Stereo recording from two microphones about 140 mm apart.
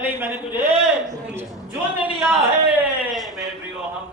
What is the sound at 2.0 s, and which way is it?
A man's voice, 5° right (ahead or behind).